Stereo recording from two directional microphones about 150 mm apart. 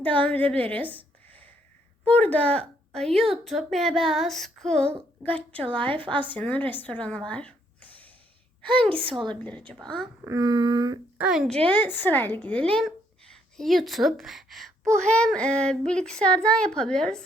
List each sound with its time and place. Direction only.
0.0 s a woman's voice: 10° left (ahead or behind)
5.6 s a woman's voice: 35° right (ahead or behind)
6.2 s speech: 10° left (ahead or behind)
9.0 s a woman's voice: 35° right (ahead or behind)
9.3 s a woman's voice: 10° left (ahead or behind)
10.2 s a sound: 25° right (ahead or behind)
11.2 s a woman's voice: 5° right (ahead or behind)